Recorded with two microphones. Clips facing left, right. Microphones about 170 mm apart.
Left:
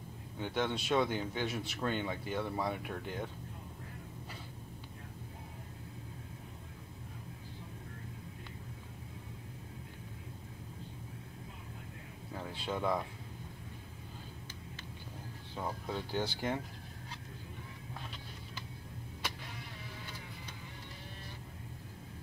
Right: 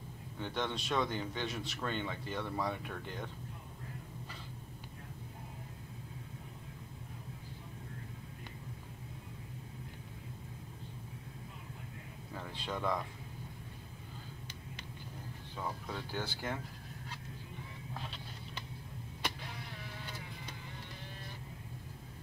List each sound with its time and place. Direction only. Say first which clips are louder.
0.4 s speech: left 3 dB; 10° left (ahead or behind)
12.4 s speech: left 3 dB; 10° left (ahead or behind)
15.5 s speech: left 3 dB; 15° left (ahead or behind)